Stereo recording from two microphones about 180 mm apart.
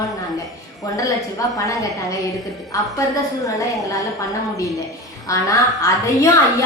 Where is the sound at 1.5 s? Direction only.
20° left (ahead or behind).